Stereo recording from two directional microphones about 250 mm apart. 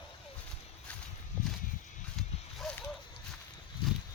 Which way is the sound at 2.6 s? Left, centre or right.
Centre.